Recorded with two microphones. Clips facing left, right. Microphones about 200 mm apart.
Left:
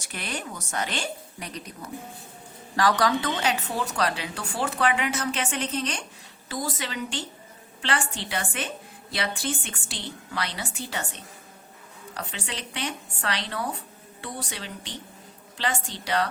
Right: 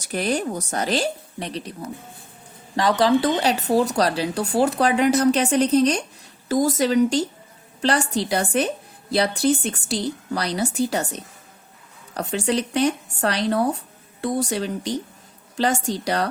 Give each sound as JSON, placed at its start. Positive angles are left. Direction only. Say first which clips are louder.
{"t": 0.0, "sound": "speech", "louder": "right 11 dB", "side_deg": -40}
{"t": 2.7, "sound": "a woman's voice", "louder": "right 5 dB", "side_deg": -25}